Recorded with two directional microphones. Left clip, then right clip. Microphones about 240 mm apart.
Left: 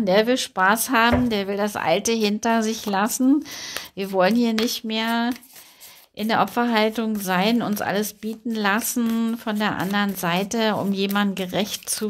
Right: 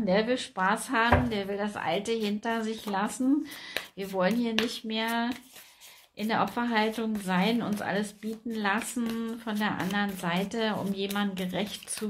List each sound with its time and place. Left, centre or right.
0.0 s speech: left